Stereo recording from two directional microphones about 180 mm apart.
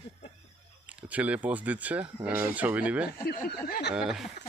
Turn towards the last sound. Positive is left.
turn(degrees=0)  # may be behind; listen again after turning